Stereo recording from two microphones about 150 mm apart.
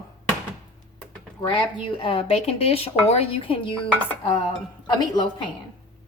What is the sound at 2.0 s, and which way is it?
Speech, 40° left (ahead or behind).